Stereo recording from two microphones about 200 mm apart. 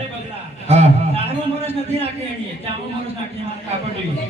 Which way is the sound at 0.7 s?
35° right (ahead or behind).